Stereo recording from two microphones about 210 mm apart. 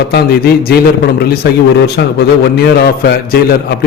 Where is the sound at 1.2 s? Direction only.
45° left (ahead or behind).